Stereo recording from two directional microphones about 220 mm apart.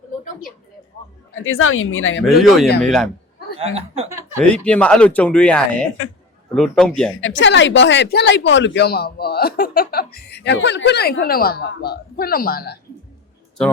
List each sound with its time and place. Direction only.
1.4 s speech: 65° left (ahead or behind)
2.2 s speech: centre (ahead or behind)
4.4 s speech: 5° left (ahead or behind)
7.2 s speech: 55° left (ahead or behind)